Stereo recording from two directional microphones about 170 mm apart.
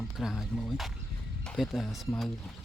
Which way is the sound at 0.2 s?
Centre (ahead or behind).